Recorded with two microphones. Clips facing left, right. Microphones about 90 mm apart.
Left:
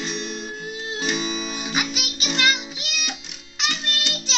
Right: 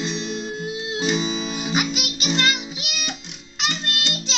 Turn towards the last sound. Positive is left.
turn(degrees=0)  # may be behind; listen again after turning